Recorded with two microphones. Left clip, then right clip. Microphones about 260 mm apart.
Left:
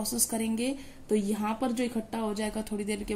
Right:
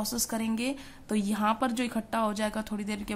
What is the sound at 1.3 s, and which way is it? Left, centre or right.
Speech, right.